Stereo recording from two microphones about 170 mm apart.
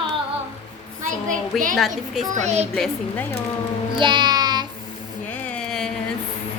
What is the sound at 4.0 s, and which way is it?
Music, 25° right (ahead or behind).